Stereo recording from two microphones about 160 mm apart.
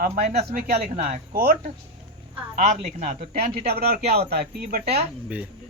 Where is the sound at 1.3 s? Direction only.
65° right (ahead or behind).